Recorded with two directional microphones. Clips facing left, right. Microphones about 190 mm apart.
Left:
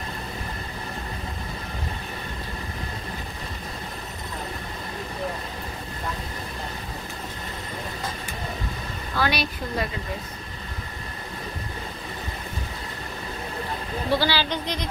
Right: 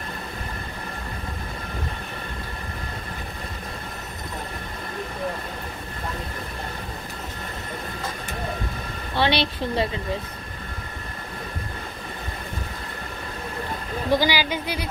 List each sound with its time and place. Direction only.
9.1 s a woman's voice: 25° right (ahead or behind)
14.1 s a woman's voice: 15° right (ahead or behind)